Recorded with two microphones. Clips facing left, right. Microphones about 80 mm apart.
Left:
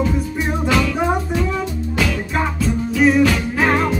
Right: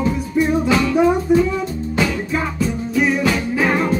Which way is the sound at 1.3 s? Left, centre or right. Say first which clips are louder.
Right 7 dB; left.